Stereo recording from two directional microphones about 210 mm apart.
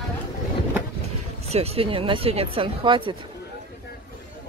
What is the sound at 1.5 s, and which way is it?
Speech, 30° right (ahead or behind).